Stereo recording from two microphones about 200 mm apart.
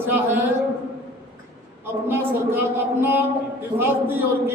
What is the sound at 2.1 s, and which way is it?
A man's voice, 10° right (ahead or behind).